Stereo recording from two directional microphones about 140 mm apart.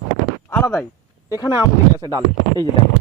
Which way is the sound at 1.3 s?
25° left (ahead or behind).